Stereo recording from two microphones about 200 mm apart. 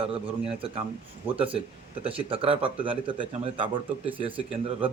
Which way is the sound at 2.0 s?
25° right (ahead or behind).